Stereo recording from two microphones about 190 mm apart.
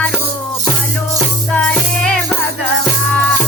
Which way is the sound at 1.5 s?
5° left (ahead or behind).